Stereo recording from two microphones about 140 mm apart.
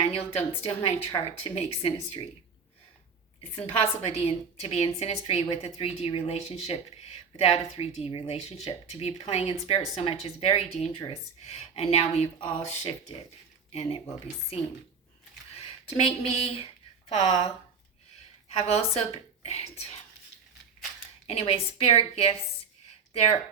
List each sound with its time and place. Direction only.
0.0 s speech: 45° left (ahead or behind)
3.6 s speech: 50° left (ahead or behind)
15.5 s speech: 45° left (ahead or behind)
21.2 s speech: 45° left (ahead or behind)